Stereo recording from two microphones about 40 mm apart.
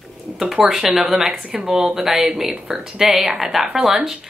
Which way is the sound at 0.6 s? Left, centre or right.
Centre.